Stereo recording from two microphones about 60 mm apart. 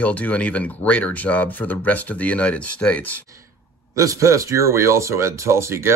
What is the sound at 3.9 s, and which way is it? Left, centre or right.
Speech, right.